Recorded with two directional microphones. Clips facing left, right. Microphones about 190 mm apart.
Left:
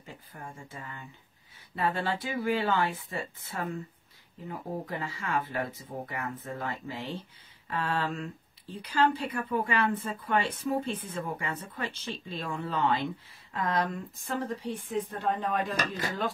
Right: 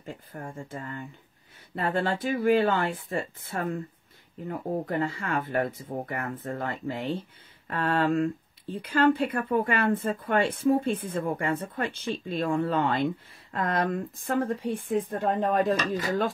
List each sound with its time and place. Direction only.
0.0 s speech: 50° right (ahead or behind)